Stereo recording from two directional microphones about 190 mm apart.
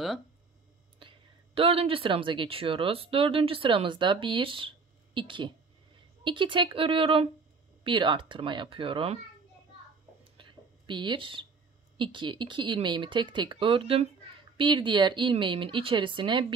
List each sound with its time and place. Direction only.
0.9 s speech: 30° right (ahead or behind)
10.3 s a sound: 25° right (ahead or behind)
12.0 s speech: 25° right (ahead or behind)